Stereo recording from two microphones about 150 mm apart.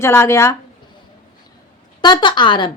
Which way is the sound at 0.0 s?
15° left (ahead or behind).